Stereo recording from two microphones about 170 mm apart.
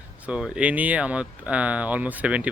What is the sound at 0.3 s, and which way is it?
Speech, 5° right (ahead or behind).